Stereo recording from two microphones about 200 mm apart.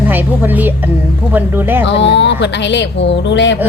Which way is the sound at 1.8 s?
60° left (ahead or behind).